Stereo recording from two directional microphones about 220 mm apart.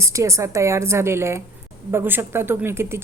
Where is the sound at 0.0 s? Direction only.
15° right (ahead or behind).